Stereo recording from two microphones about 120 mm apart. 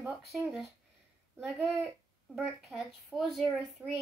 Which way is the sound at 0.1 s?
Centre (ahead or behind).